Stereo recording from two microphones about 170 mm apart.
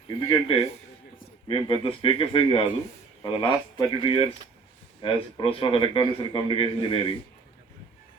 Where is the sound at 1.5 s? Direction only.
30° left (ahead or behind).